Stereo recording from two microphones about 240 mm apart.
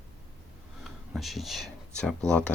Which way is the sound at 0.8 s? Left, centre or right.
Centre.